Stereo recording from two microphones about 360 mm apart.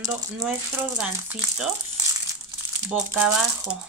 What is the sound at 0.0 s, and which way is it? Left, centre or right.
Speech, centre.